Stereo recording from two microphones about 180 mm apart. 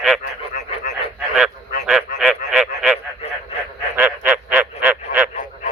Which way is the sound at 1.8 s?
Centre (ahead or behind).